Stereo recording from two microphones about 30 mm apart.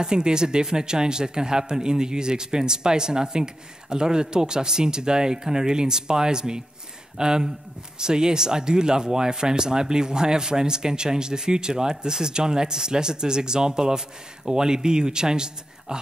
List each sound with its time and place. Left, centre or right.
0.0 s speech: right